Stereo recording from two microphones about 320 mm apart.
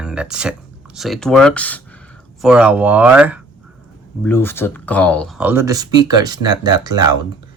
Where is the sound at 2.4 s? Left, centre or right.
Centre.